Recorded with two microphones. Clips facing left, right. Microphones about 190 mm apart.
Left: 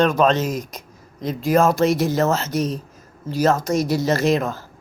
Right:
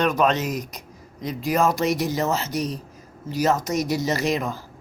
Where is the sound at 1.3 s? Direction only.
50° left (ahead or behind).